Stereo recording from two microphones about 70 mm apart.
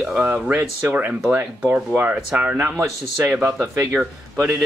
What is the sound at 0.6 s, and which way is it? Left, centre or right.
Speech, right.